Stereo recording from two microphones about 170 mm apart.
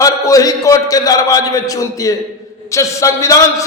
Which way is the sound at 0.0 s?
20° left (ahead or behind).